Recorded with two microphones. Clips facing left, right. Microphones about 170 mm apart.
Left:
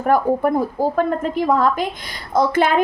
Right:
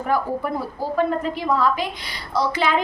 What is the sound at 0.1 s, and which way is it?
A woman's voice, 50° left (ahead or behind).